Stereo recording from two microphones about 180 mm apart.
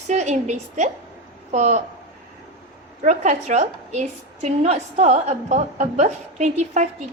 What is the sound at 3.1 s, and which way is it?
A woman's voice, 40° right (ahead or behind).